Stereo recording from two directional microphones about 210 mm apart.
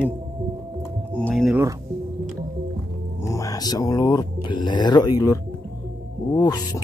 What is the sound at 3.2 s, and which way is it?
Speech, 15° left (ahead or behind).